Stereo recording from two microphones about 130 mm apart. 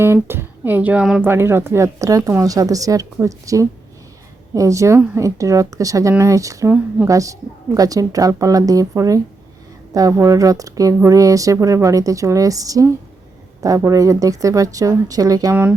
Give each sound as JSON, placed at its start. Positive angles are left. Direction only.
{"t": 0.0, "sound": "speech", "side_deg": -20}
{"t": 1.3, "sound": "speech", "side_deg": -20}